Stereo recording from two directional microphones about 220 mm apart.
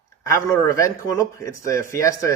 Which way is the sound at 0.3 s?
15° left (ahead or behind).